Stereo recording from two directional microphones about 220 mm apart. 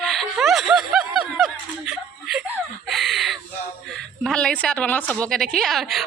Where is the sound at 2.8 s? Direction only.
Centre (ahead or behind).